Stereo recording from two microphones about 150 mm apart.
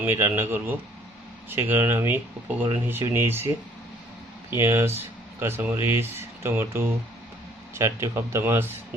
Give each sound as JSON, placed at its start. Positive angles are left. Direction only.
{"t": 0.0, "sound": "speech", "side_deg": -15}
{"t": 4.5, "sound": "speech", "side_deg": -20}